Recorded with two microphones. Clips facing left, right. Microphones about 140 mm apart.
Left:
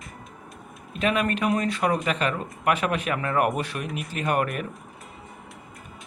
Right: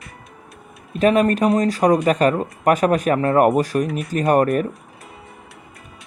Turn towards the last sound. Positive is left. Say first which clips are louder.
# right 9 dB
turn(degrees=-40)  # may be behind; listen again after turning